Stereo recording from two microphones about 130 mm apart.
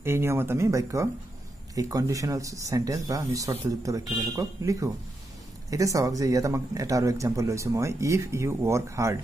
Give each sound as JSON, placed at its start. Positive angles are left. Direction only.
{"t": 0.0, "sound": "speech", "side_deg": -20}